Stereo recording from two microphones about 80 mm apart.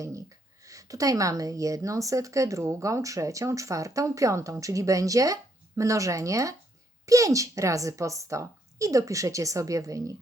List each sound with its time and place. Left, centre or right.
0.6 s a woman's voice: right